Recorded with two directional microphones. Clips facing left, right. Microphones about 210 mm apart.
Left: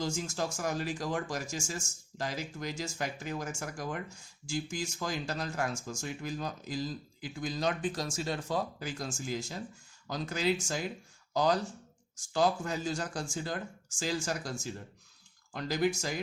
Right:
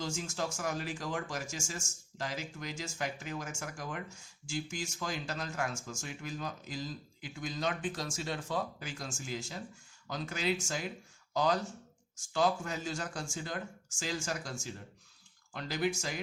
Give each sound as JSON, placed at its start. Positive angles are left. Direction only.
{"t": 0.0, "sound": "speech", "side_deg": 35}